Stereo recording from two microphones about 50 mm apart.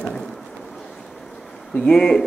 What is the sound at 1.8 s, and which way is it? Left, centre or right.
Speech, centre.